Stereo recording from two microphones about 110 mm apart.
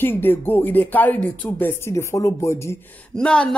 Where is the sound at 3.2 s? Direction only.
10° left (ahead or behind).